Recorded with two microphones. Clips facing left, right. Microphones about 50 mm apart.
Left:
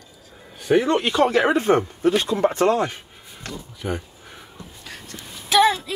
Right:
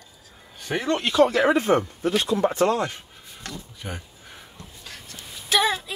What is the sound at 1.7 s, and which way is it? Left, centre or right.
Speech, left.